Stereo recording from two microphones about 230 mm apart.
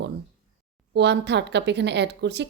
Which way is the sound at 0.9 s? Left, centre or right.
Right.